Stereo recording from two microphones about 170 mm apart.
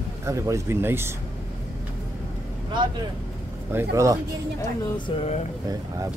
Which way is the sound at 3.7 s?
20° right (ahead or behind).